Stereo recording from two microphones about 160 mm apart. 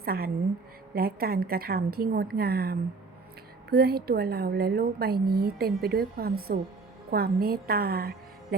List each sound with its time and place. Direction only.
0.0 s a woman's voice: 70° right (ahead or behind)